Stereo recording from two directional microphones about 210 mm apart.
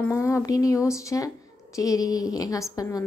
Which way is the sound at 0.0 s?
15° left (ahead or behind).